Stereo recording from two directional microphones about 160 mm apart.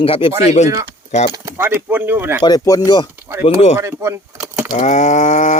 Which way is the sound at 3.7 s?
20° right (ahead or behind).